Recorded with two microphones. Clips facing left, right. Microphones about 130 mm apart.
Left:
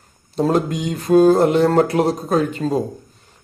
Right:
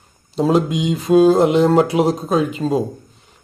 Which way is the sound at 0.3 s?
Centre (ahead or behind).